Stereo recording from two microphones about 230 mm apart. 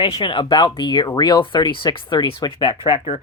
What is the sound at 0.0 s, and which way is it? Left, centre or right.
Speech, left.